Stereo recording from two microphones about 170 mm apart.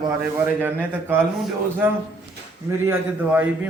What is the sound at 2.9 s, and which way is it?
Speech, 10° right (ahead or behind).